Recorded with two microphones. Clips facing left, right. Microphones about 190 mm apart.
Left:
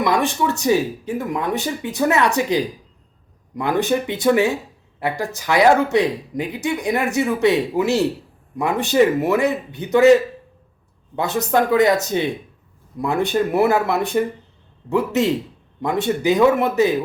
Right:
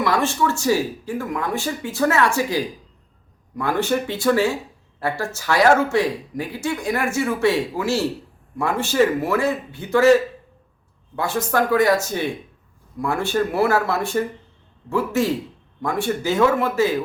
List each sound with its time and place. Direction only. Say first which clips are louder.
0.0 s speech: left 1 dB; 15° left (ahead or behind)